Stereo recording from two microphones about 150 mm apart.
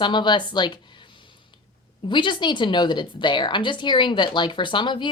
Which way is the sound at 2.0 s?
30° left (ahead or behind).